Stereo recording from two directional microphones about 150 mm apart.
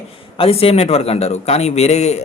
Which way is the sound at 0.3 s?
40° left (ahead or behind).